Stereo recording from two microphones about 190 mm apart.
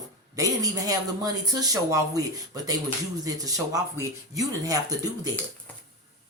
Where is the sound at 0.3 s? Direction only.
20° right (ahead or behind).